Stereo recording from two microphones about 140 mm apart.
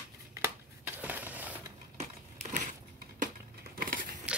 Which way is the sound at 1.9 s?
55° right (ahead or behind).